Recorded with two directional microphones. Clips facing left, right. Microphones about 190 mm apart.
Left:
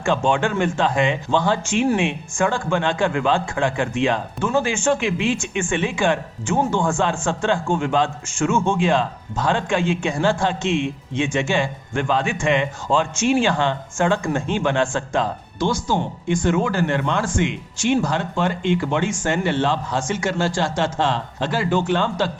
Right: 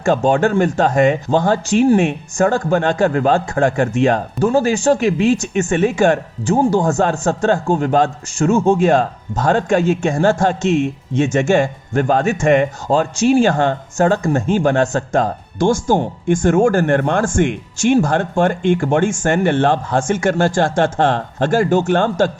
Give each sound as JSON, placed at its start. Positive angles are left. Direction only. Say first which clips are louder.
{"t": 0.0, "sound": "speech", "louder": "right 5 dB", "side_deg": -40}